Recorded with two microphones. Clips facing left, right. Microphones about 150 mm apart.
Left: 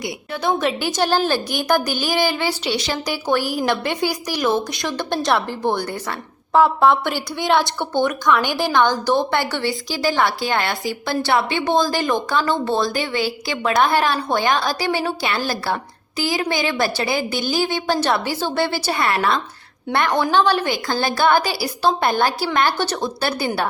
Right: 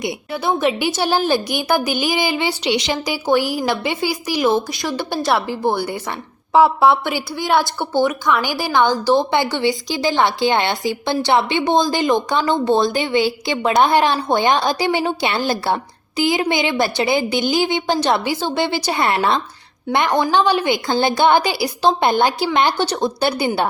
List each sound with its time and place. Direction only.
0.4 s a woman's voice: 10° right (ahead or behind)
19.9 s speech: 15° right (ahead or behind)
20.7 s a woman's voice: 25° right (ahead or behind)